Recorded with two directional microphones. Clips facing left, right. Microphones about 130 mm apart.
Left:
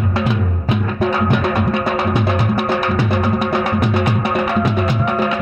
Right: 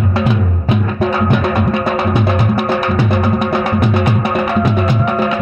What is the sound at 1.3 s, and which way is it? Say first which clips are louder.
Music: right 2 dB; 50° right (ahead or behind).